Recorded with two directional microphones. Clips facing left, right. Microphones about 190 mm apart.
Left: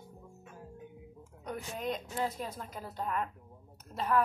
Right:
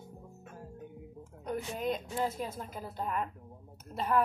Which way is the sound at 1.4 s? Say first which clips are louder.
Right 3 dB; centre (ahead or behind).